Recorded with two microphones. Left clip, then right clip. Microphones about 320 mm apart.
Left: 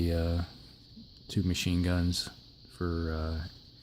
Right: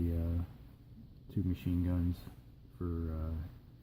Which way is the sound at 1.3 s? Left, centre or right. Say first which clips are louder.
Left 6 dB; left.